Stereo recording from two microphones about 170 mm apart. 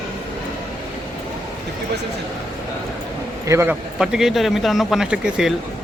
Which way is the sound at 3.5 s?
15° right (ahead or behind).